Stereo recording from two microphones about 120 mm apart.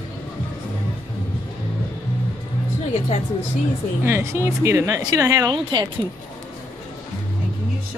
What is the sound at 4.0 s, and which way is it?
Speech, 20° right (ahead or behind).